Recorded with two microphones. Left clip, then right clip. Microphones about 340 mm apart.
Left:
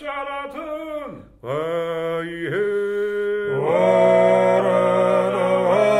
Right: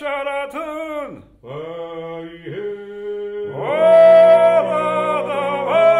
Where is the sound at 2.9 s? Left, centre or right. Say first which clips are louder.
Left 4 dB; left.